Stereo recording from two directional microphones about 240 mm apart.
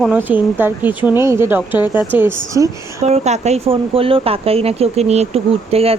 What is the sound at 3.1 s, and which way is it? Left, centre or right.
Speech, right.